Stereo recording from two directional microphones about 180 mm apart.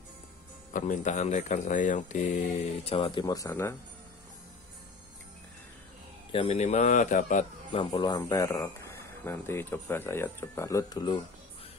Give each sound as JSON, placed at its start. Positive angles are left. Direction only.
{"t": 0.7, "sound": "speech", "side_deg": 45}
{"t": 6.3, "sound": "a man's voice", "side_deg": 35}
{"t": 7.8, "sound": "speech", "side_deg": 25}